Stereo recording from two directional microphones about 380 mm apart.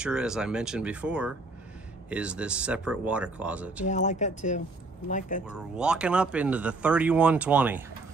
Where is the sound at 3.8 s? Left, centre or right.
Centre.